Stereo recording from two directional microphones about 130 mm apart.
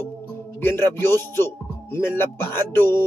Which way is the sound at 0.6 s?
15° left (ahead or behind).